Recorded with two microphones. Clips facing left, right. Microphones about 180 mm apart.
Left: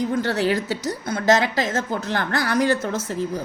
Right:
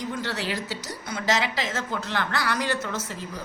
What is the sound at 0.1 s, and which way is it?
A woman's voice, 50° left (ahead or behind).